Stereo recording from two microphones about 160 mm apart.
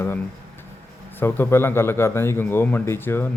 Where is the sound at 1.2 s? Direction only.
15° left (ahead or behind).